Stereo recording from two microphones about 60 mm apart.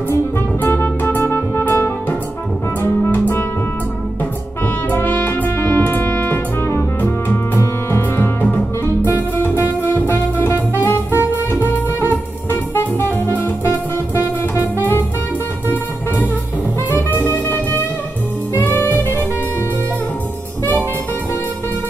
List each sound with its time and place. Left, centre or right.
0.6 s music: left
4.8 s music: left
12.4 s music: left
16.9 s music: left